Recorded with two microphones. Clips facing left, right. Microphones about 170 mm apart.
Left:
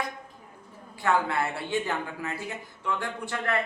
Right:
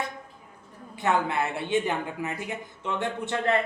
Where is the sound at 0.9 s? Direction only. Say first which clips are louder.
Right 1 dB; 20° right (ahead or behind).